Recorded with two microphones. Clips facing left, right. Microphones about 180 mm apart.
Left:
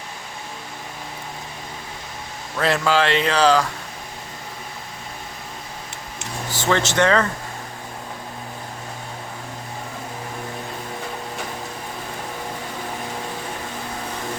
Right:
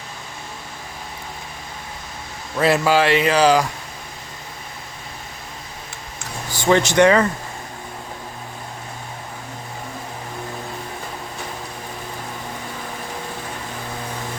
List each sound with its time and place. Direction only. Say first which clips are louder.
2.6 s speech: right 3 dB; 10° right (ahead or behind)
6.5 s speech: right 4 dB; 15° right (ahead or behind)